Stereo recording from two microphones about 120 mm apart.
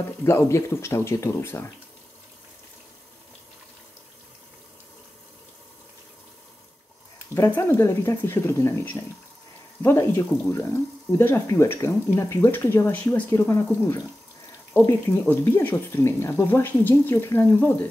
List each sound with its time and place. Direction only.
0.2 s speech: 25° left (ahead or behind)
7.3 s speech: 20° left (ahead or behind)
14.9 s speech: 20° left (ahead or behind)